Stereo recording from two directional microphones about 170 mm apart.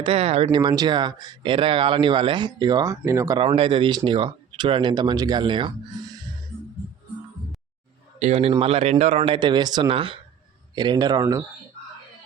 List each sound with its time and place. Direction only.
0.0 s speech: 35° right (ahead or behind); by 3.4 s 20° right (ahead or behind)
3.4 s speech: 30° right (ahead or behind)
8.2 s speech: 35° right (ahead or behind); by 11.4 s 20° right (ahead or behind)